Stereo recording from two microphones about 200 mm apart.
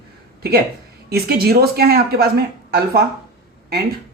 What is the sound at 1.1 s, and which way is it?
Speech, 50° right (ahead or behind).